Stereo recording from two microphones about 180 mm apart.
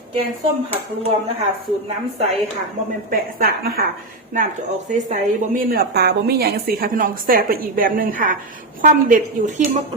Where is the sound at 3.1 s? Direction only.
55° right (ahead or behind).